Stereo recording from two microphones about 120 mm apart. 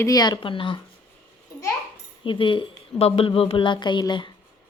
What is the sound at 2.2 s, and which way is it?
Speech, 45° left (ahead or behind).